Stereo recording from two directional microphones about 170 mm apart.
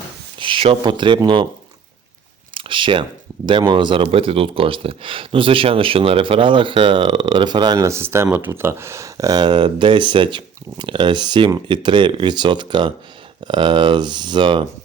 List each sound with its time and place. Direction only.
0.3 s speech: 30° right (ahead or behind)
2.6 s speech: 30° right (ahead or behind)